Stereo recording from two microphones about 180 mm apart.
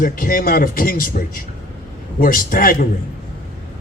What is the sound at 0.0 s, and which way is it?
A man's voice, 50° left (ahead or behind).